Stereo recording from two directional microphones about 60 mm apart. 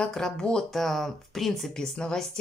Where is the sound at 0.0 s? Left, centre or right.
Centre.